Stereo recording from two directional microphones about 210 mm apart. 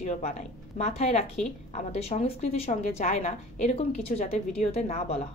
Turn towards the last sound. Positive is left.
turn(degrees=30)  # may be behind; listen again after turning